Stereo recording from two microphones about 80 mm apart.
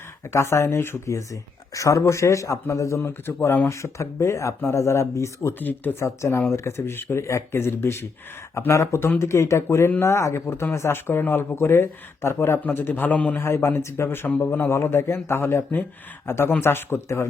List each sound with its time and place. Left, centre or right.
0.3 s speech: left
3.1 s speech: left
5.5 s speech: left
13.4 s speech: left